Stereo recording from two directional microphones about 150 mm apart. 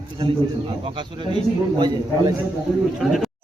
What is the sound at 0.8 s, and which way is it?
A man's voice, 35° right (ahead or behind).